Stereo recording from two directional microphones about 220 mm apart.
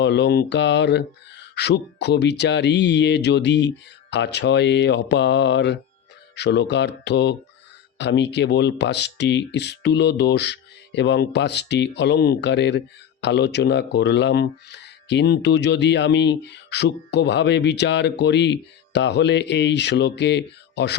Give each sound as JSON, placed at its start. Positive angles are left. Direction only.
{"t": 0.0, "sound": "speech", "side_deg": 50}